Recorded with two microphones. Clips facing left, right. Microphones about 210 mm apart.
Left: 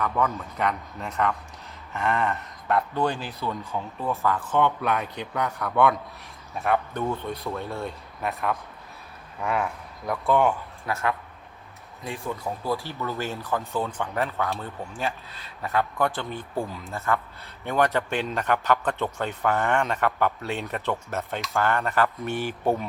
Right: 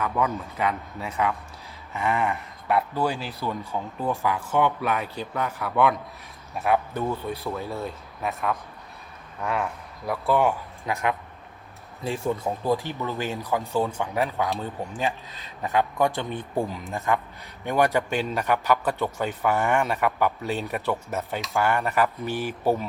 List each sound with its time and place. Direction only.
0.0 s speech: 5° right (ahead or behind)
1.9 s a sound: centre (ahead or behind)
2.3 s speech: 5° right (ahead or behind)
10.8 s speech: 15° right (ahead or behind)
12.0 s speech: 25° right (ahead or behind)
20.0 s speech: centre (ahead or behind)
20.7 s speech: 15° right (ahead or behind)
21.1 s speech: 5° right (ahead or behind)
21.6 s speech: 15° right (ahead or behind)
21.8 s speech: centre (ahead or behind)